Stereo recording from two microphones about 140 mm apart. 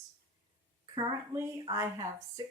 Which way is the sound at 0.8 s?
30° right (ahead or behind).